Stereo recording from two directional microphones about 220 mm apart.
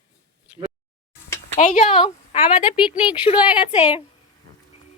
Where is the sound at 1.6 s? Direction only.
35° left (ahead or behind).